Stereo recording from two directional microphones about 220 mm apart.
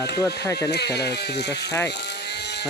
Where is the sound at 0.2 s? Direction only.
15° left (ahead or behind).